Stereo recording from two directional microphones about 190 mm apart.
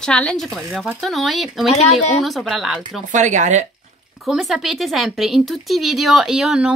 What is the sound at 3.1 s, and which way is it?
Speech, 40° right (ahead or behind).